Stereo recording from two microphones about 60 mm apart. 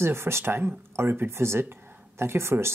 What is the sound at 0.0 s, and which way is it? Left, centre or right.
Speech, right.